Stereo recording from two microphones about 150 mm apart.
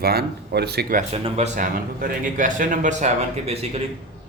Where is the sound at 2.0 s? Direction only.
70° right (ahead or behind).